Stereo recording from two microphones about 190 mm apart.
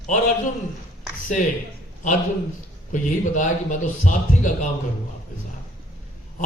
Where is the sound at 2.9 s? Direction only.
40° left (ahead or behind).